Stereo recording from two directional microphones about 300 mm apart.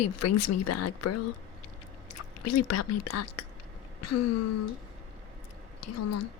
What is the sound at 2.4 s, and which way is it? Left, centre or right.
Speech, left.